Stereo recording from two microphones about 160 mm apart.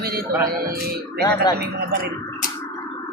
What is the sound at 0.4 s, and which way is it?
Speech, 75° right (ahead or behind).